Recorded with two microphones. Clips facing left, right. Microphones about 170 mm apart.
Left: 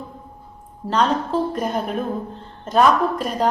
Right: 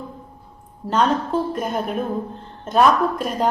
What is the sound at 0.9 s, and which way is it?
A woman's voice, centre (ahead or behind).